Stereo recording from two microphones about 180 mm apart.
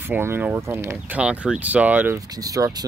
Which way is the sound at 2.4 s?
20° right (ahead or behind).